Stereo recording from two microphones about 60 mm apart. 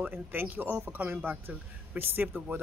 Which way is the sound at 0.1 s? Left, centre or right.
Right.